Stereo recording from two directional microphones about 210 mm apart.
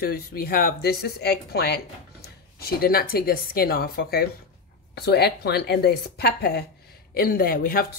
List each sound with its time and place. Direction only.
0.0 s speech: 45° left (ahead or behind)